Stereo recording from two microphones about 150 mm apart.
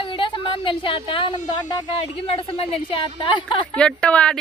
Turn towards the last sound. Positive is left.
turn(degrees=5)  # may be behind; listen again after turning